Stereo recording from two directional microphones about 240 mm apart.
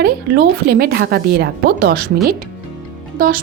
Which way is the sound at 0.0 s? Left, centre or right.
Right.